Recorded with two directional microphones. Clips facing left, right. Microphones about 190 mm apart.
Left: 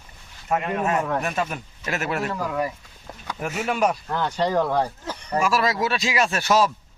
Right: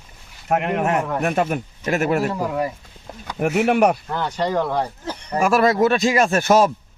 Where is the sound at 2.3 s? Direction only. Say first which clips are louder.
Right 3 dB; 25° right (ahead or behind).